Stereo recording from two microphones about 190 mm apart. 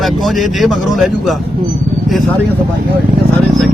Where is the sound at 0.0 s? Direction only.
Centre (ahead or behind).